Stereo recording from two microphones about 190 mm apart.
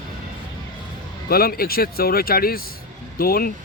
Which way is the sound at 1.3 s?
50° left (ahead or behind).